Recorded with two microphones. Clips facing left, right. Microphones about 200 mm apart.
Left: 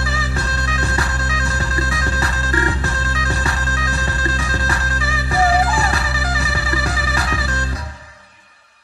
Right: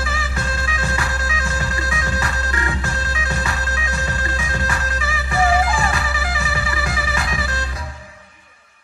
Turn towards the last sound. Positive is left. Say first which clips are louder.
# left 2 dB
turn(degrees=40)  # may be behind; listen again after turning